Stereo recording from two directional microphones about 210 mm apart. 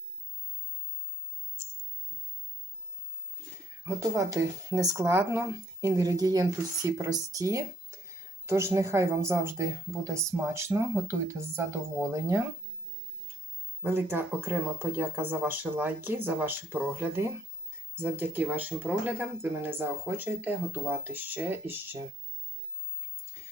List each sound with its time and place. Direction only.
3.8 s speech: 15° right (ahead or behind)
13.8 s speech: 10° right (ahead or behind)